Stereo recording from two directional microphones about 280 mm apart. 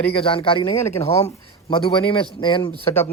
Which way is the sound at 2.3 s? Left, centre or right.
Centre.